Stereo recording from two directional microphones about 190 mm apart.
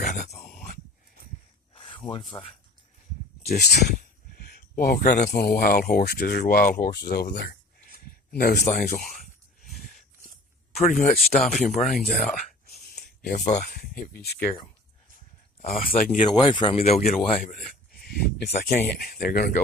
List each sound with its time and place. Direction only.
0.0 s dog: 40° left (ahead or behind)
1.7 s a sound: 25° left (ahead or behind)
2.3 s speech: 20° left (ahead or behind)
3.4 s speech: 55° left (ahead or behind)
5.3 s speech: 55° left (ahead or behind)
7.9 s a sound: 55° left (ahead or behind)
8.6 s speech: 40° left (ahead or behind)
10.8 s speech: 40° left (ahead or behind)
13.0 s a sound: 50° left (ahead or behind)
13.7 s speech: 50° left (ahead or behind)
15.9 s speech: 50° left (ahead or behind)
16.3 s speech: 25° left (ahead or behind)
17.4 s speech: 45° left (ahead or behind)